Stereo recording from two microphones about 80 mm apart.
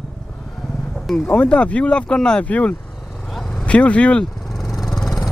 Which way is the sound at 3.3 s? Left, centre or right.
Centre.